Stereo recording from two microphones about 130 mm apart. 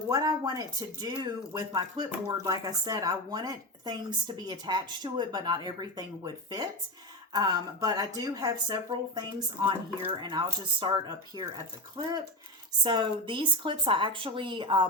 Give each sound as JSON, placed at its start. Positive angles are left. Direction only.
{"t": 0.1, "sound": "speech", "side_deg": -30}
{"t": 12.0, "sound": "speech", "side_deg": -35}